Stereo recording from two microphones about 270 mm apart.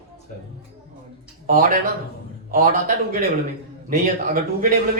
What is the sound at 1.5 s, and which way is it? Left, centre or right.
A man's voice, right.